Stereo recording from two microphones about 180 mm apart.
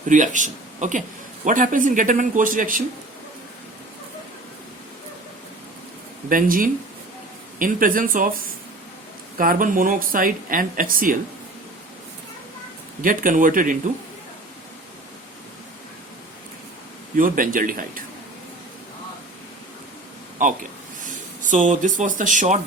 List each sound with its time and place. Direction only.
0.1 s speech: 45° right (ahead or behind)
6.2 s speech: 50° right (ahead or behind)
13.0 s speech: 50° right (ahead or behind)
17.2 s speech: 50° right (ahead or behind)
20.4 s speech: 45° right (ahead or behind)